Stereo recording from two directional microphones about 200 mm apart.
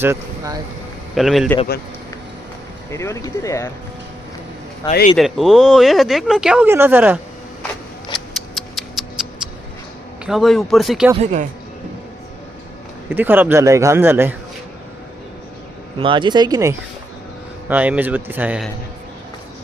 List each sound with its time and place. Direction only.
0.0 s speech: 15° right (ahead or behind)
1.1 s speech: centre (ahead or behind)
2.9 s speech: 15° left (ahead or behind)
4.9 s speech: 40° left (ahead or behind)
5.1 s speech: centre (ahead or behind)
8.5 s a sound: centre (ahead or behind)
10.2 s speech: centre (ahead or behind)
13.1 s a man's voice: 10° right (ahead or behind)
16.0 s a man's voice: 25° right (ahead or behind); by 18.7 s 5° right (ahead or behind)